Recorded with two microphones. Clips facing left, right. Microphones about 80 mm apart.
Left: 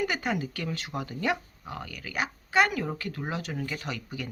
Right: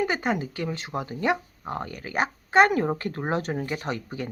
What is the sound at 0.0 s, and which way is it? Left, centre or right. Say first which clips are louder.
Speech: right 4 dB; right.